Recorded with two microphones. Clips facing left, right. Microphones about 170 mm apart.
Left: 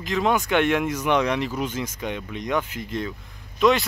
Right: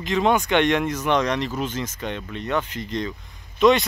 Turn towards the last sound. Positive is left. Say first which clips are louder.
# right 2 dB
turn(degrees=0)  # may be behind; listen again after turning